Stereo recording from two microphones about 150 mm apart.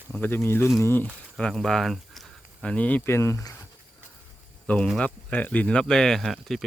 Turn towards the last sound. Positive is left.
turn(degrees=0)  # may be behind; listen again after turning